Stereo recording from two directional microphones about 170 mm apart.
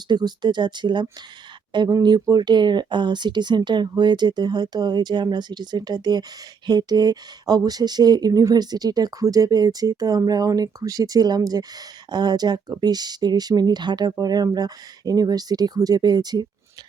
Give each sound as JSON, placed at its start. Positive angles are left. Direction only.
{"t": 0.1, "sound": "speech", "side_deg": -25}